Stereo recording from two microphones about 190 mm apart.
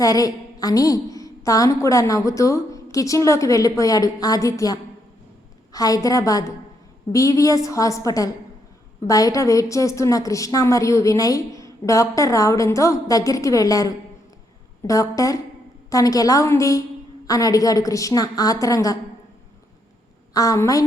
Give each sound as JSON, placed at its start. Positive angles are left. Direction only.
{"t": 0.0, "sound": "a woman's voice", "side_deg": 20}
{"t": 20.3, "sound": "a woman's voice", "side_deg": 20}